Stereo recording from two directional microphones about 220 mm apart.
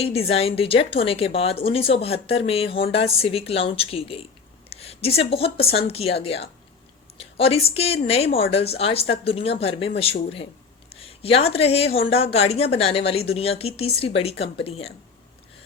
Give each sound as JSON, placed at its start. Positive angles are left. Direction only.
{"t": 0.0, "sound": "a woman's voice", "side_deg": 25}